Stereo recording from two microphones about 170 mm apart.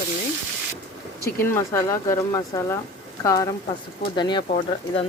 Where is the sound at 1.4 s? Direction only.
15° left (ahead or behind).